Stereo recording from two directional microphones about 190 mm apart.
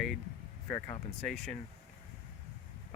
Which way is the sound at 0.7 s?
10° left (ahead or behind).